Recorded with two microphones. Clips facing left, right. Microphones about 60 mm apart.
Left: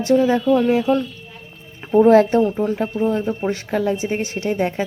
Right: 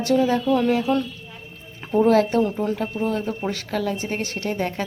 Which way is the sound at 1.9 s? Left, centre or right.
Left.